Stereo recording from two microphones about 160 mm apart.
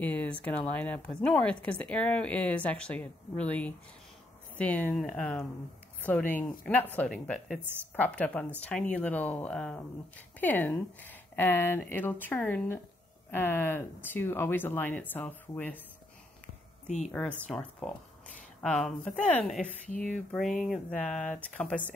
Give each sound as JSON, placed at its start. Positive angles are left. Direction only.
{"t": 0.0, "sound": "a woman's voice", "side_deg": 10}
{"t": 16.8, "sound": "speech", "side_deg": 45}
{"t": 17.1, "sound": "a woman's voice", "side_deg": 10}